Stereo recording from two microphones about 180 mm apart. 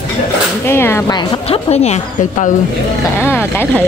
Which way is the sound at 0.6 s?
15° left (ahead or behind).